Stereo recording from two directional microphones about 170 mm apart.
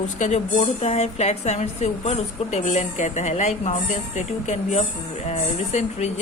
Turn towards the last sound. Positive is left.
turn(degrees=40)  # may be behind; listen again after turning